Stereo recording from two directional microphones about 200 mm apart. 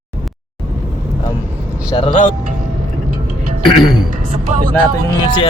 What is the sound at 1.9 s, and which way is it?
Music, 25° left (ahead or behind).